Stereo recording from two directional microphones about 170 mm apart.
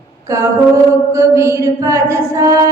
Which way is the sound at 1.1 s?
15° right (ahead or behind).